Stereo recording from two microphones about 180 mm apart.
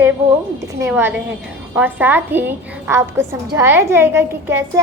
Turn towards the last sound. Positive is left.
turn(degrees=-15)  # may be behind; listen again after turning